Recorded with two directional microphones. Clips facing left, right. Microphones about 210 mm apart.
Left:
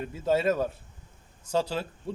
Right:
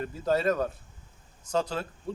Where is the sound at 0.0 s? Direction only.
5° left (ahead or behind).